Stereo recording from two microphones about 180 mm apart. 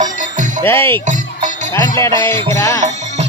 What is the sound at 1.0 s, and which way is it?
Music, 45° right (ahead or behind).